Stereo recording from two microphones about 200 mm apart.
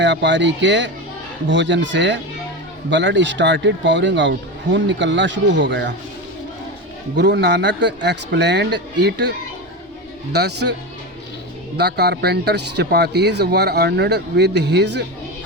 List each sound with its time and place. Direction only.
0.0 s speech: 65° right (ahead or behind)
7.2 s speech: 60° right (ahead or behind)
10.3 s speech: 55° right (ahead or behind)
11.8 s speech: 55° right (ahead or behind)